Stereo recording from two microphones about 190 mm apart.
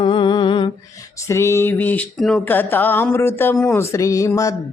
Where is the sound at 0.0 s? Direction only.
25° left (ahead or behind).